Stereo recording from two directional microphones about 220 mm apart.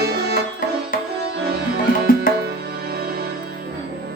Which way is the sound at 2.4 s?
45° right (ahead or behind).